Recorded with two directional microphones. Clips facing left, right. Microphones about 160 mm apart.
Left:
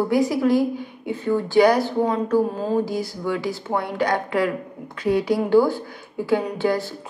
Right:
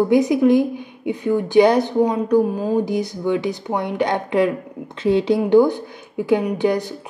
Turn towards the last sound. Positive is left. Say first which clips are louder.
# right 3 dB
turn(degrees=-20)  # may be behind; listen again after turning